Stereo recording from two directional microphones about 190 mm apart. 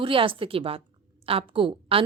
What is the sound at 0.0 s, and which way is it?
A woman's voice, 30° right (ahead or behind).